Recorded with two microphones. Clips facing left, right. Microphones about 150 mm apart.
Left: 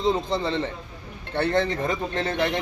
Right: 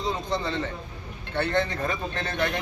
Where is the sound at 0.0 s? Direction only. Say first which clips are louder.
Left 5 dB; 30° left (ahead or behind).